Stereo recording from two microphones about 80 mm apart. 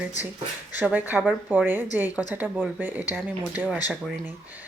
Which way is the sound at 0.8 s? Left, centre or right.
Right.